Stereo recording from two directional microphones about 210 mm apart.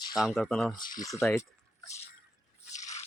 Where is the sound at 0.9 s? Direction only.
15° left (ahead or behind).